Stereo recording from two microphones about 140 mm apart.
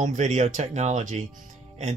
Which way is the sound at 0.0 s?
60° right (ahead or behind).